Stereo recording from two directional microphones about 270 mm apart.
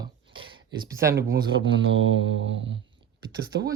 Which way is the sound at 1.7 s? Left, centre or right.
Right.